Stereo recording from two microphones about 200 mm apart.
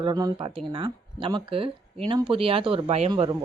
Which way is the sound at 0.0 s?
20° right (ahead or behind).